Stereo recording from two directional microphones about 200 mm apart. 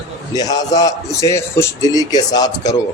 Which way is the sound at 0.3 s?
20° left (ahead or behind).